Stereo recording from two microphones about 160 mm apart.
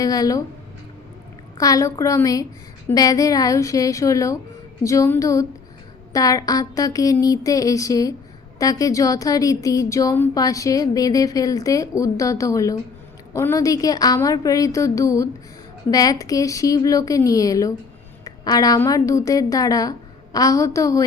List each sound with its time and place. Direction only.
0.0 s speech: 20° left (ahead or behind)
1.5 s a woman's voice: 20° left (ahead or behind)